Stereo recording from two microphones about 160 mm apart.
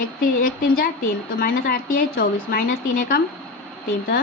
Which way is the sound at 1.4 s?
65° left (ahead or behind).